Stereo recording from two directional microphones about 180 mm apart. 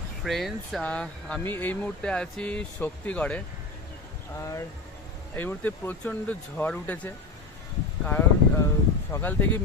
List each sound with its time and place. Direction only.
0.2 s speech: centre (ahead or behind)